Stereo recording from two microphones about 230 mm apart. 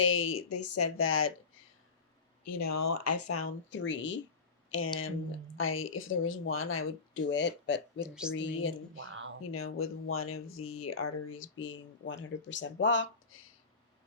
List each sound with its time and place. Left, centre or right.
0.0 s speech: left
2.9 s speech: left
4.7 s speech: left
8.0 s speech: centre
8.3 s speech: left
9.0 s speech: right
9.4 s speech: left